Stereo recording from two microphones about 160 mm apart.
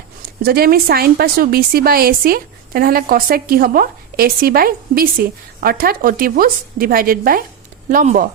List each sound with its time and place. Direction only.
0.4 s a woman's voice: 70° right (ahead or behind)